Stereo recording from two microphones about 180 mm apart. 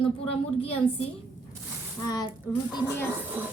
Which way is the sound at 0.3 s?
35° left (ahead or behind).